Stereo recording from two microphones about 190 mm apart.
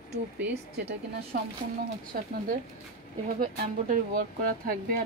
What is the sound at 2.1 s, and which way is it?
Speech, 45° right (ahead or behind).